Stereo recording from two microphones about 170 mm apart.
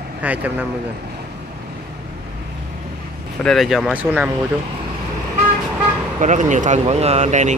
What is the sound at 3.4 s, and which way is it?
Speech, centre (ahead or behind).